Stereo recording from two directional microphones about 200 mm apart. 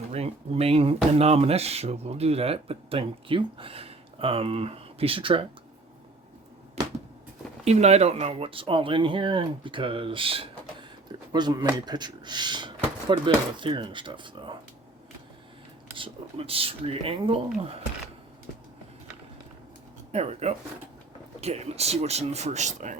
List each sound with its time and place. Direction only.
0.1 s speech: 30° right (ahead or behind)
7.6 s speech: 30° right (ahead or behind)
16.0 s speech: 30° right (ahead or behind)
20.1 s speech: 30° right (ahead or behind)